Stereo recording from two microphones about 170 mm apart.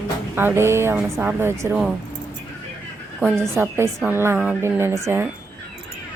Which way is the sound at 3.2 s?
10° right (ahead or behind).